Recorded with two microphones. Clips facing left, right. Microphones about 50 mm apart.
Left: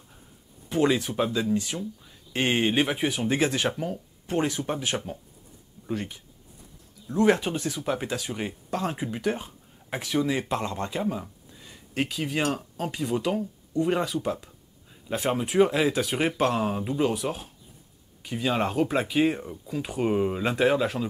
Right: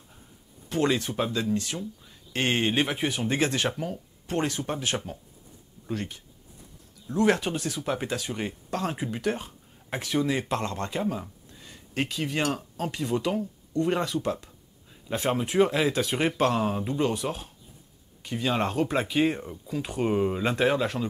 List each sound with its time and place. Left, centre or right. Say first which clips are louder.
0.7 s speech: left 2 dB; centre
11.0 s a sound: even; centre
12.4 s speech: left 1 dB; centre
12.8 s speech: even; centre